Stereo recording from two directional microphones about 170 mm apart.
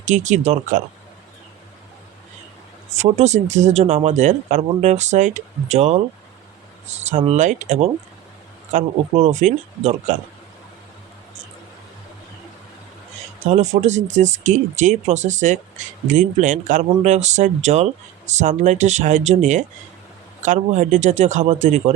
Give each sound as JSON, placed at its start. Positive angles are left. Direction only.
{"t": 0.1, "sound": "speech", "side_deg": -45}
{"t": 3.0, "sound": "speech", "side_deg": -40}
{"t": 13.4, "sound": "speech", "side_deg": -45}